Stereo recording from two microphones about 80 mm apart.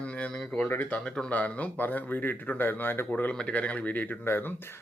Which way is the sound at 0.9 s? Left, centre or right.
Centre.